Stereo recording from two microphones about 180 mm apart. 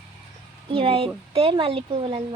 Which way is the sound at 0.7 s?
30° right (ahead or behind).